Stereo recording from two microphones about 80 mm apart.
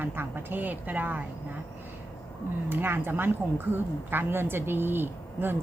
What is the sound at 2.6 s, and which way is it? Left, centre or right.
A woman's voice, right.